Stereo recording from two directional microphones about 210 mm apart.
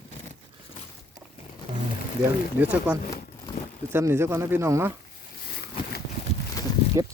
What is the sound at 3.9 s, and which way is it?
Speech, 10° right (ahead or behind).